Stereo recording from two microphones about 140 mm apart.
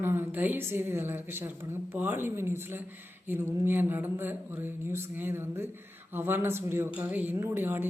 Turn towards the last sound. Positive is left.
turn(degrees=-15)  # may be behind; listen again after turning